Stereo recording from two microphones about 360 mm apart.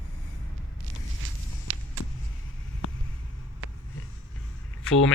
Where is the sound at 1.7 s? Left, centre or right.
Right.